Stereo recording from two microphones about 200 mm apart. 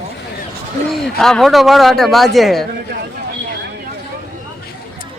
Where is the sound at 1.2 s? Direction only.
Centre (ahead or behind).